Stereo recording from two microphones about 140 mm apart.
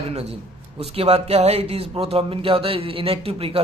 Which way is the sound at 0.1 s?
50° right (ahead or behind).